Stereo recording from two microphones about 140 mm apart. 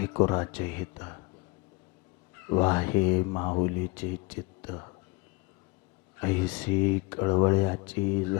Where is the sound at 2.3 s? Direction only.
20° left (ahead or behind).